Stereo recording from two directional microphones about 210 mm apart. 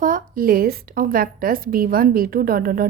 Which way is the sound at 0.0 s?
40° right (ahead or behind).